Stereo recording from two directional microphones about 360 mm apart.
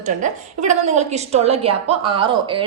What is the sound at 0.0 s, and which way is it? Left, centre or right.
A woman's voice, right.